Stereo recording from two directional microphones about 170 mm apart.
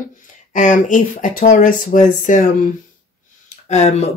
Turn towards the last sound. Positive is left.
turn(degrees=40)  # may be behind; listen again after turning